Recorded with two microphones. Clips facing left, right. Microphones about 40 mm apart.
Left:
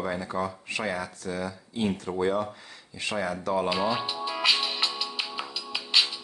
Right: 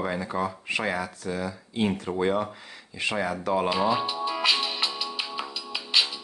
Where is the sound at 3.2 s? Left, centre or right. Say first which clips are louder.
Right 1 dB; centre.